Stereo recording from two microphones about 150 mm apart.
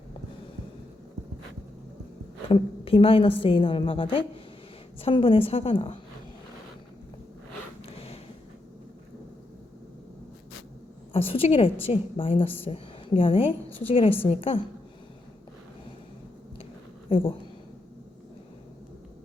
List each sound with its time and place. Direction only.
2.5 s a woman's voice: 40° left (ahead or behind)
7.9 s a sound: 40° left (ahead or behind)
11.3 s a woman's voice: 40° left (ahead or behind)
17.1 s speech: 40° left (ahead or behind)